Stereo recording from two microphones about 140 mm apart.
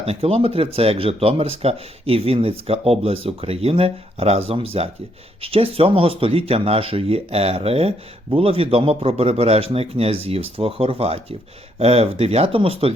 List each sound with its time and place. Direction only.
0.0 s speech: 45° right (ahead or behind)